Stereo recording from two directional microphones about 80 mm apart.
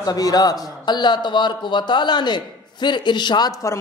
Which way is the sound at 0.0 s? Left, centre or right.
Left.